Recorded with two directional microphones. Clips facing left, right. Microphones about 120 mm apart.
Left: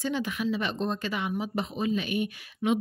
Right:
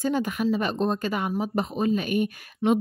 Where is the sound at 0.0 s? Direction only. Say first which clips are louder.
Right 5 dB; 45° right (ahead or behind).